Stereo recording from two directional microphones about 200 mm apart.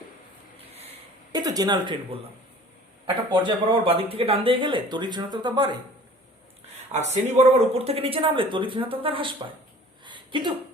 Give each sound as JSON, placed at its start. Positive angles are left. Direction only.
{"t": 1.3, "sound": "speech", "side_deg": -20}
{"t": 3.2, "sound": "speech", "side_deg": -25}
{"t": 6.9, "sound": "speech", "side_deg": -35}
{"t": 10.0, "sound": "a sound", "side_deg": -25}